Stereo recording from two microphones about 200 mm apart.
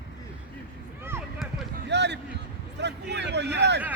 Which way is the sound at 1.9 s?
60° right (ahead or behind).